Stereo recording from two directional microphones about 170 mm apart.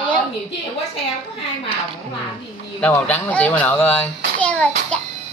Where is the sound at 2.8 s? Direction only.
10° left (ahead or behind).